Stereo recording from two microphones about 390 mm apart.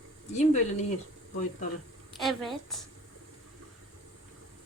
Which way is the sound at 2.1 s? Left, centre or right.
Centre.